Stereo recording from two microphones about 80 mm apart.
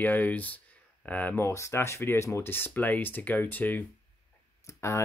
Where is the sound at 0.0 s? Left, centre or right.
Left.